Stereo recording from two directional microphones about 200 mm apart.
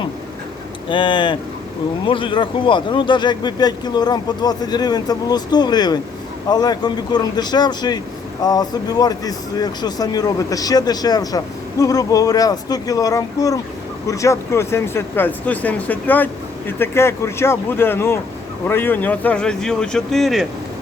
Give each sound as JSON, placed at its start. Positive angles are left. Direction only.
{"t": 0.9, "sound": "speech", "side_deg": 25}